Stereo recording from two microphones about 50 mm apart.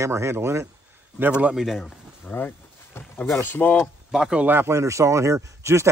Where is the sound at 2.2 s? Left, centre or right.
Left.